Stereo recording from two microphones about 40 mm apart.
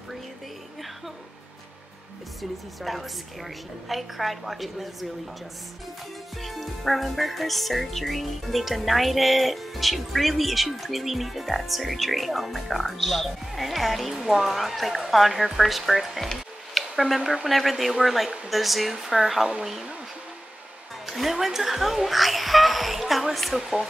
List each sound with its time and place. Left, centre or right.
2.8 s speech: centre
6.3 s speech: centre
14.1 s speech: centre
16.7 s a sound: centre
17.5 s speech: centre
21.0 s speech: centre